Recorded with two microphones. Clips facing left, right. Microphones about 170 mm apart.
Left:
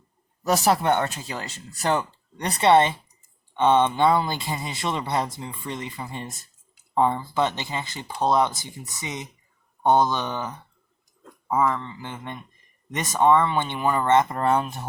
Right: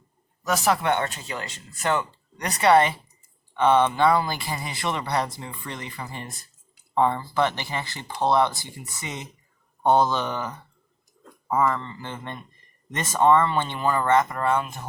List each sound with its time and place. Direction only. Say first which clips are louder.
0.4 s speech: left 2 dB; 35° left (ahead or behind); by 10.5 s 15° left (ahead or behind)
11.4 s speech: even; 5° left (ahead or behind); by 14.8 s 35° left (ahead or behind)